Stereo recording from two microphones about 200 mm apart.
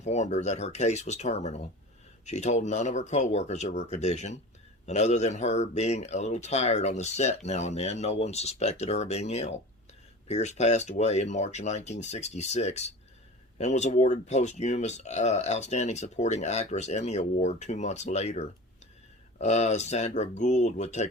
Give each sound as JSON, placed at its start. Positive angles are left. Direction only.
{"t": 0.0, "sound": "speech", "side_deg": 35}